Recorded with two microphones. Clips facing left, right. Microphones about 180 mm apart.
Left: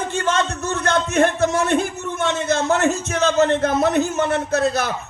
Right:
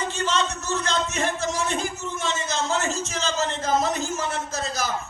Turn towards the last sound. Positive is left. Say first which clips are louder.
# left 9 dB
turn(degrees=65)  # may be behind; listen again after turning